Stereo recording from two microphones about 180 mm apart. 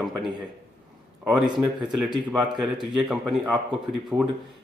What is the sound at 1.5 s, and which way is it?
Speech, 25° right (ahead or behind).